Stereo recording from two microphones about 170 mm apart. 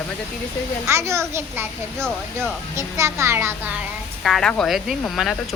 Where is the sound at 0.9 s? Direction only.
15° right (ahead or behind).